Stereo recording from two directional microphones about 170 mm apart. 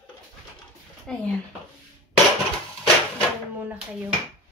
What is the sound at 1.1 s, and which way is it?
Speech, 5° left (ahead or behind).